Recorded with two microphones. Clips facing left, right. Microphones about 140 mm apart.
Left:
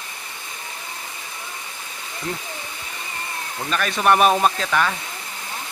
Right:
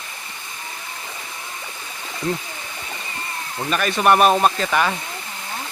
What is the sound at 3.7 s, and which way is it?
Speech, 5° right (ahead or behind).